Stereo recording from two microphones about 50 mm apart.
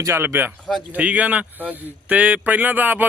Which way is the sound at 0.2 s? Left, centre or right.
Right.